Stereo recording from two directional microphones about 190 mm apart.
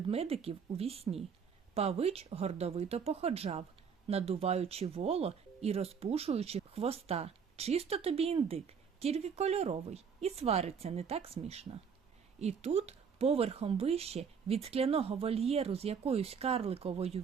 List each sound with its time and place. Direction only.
0.1 s speech: 30° right (ahead or behind)